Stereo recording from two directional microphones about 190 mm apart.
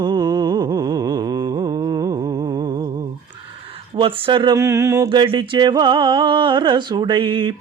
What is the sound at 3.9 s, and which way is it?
Music, 25° right (ahead or behind).